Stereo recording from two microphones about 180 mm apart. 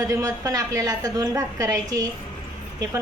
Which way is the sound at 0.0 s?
15° right (ahead or behind).